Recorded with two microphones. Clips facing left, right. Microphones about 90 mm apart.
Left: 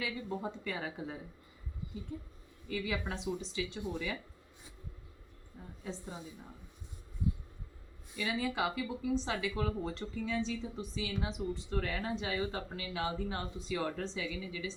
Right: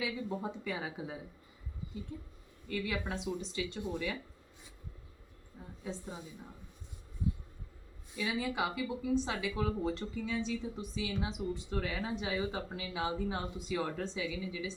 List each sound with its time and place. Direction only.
0.0 s speech: 5° right (ahead or behind)
5.8 s speech: 5° right (ahead or behind)
8.1 s speech: 5° right (ahead or behind)